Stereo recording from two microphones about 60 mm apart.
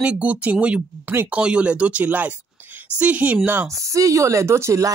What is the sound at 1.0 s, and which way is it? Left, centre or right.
Speech, right.